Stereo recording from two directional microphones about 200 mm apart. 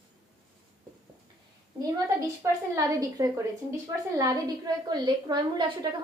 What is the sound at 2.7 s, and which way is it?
A woman's voice, 15° right (ahead or behind).